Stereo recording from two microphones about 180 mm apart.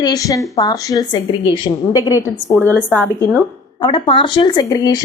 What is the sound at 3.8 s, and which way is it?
A woman's voice, 25° left (ahead or behind).